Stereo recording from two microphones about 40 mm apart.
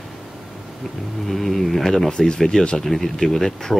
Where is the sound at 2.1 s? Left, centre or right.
Left.